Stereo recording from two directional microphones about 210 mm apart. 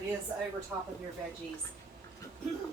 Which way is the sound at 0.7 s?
5° right (ahead or behind).